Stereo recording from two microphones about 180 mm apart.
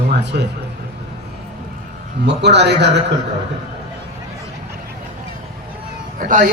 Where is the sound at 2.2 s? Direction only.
75° right (ahead or behind).